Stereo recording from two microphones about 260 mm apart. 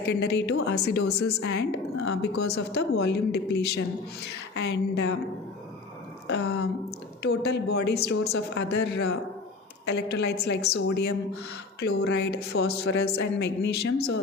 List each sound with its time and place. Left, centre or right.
0.0 s speech: left
6.2 s speech: left